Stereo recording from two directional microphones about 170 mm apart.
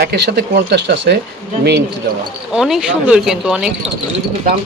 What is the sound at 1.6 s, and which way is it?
Speech, 75° right (ahead or behind).